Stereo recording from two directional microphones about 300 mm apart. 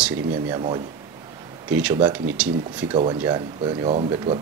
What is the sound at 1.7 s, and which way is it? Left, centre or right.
Speech, centre.